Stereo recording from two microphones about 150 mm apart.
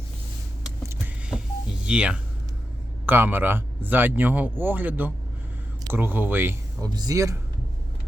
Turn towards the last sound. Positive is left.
turn(degrees=-20)  # may be behind; listen again after turning